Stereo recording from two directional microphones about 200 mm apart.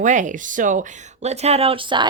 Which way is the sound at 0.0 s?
40° right (ahead or behind).